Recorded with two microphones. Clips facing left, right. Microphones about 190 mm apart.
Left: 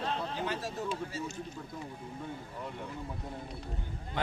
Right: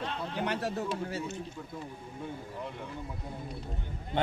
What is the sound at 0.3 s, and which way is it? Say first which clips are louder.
Speech: right 3 dB; 65° right (ahead or behind).